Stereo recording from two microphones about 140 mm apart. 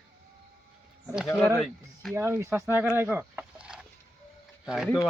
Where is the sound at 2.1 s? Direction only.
15° right (ahead or behind).